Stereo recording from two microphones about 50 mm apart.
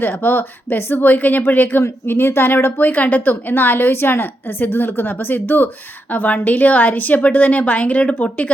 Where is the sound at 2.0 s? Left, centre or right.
Left.